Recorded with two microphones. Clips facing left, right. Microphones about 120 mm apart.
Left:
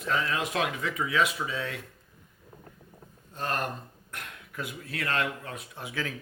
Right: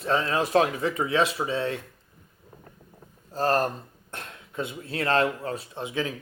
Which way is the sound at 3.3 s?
35° right (ahead or behind).